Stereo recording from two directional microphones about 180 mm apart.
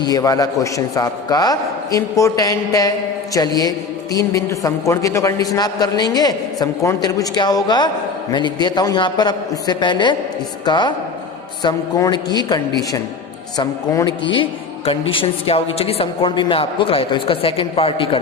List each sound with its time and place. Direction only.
0.0 s a woman's voice: 20° left (ahead or behind)